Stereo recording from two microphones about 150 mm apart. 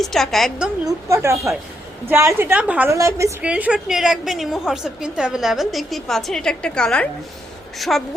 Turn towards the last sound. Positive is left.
turn(degrees=0)  # may be behind; listen again after turning